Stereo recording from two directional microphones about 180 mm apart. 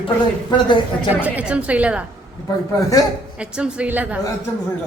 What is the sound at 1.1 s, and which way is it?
Speech, 10° right (ahead or behind).